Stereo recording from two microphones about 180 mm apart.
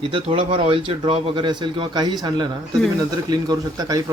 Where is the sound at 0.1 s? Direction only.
30° right (ahead or behind).